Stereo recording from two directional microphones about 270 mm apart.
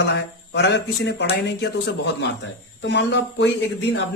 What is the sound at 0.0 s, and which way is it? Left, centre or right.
Speech, left.